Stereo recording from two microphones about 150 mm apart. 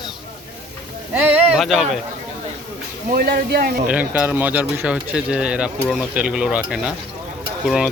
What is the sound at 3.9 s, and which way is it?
Speech, 10° right (ahead or behind).